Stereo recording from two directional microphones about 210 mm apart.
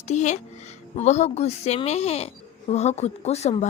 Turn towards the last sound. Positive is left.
turn(degrees=30)  # may be behind; listen again after turning